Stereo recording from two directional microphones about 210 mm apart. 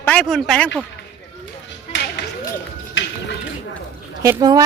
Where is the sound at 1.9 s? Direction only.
60° left (ahead or behind).